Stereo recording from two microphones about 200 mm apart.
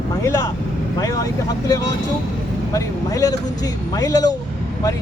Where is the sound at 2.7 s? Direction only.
15° left (ahead or behind).